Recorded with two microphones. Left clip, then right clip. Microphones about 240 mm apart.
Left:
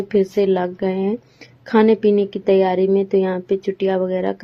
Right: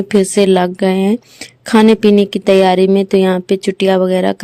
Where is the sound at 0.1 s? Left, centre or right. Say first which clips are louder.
Right 6 dB; right.